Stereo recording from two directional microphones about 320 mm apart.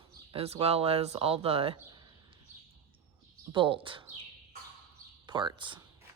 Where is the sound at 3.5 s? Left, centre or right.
Centre.